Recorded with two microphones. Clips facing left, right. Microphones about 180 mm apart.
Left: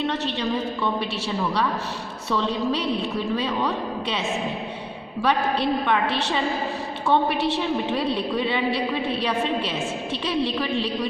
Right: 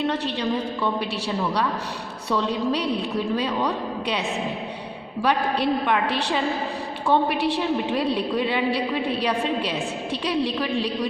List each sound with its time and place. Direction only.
2.3 s a woman's voice: 10° right (ahead or behind)
5.2 s a woman's voice: 10° right (ahead or behind)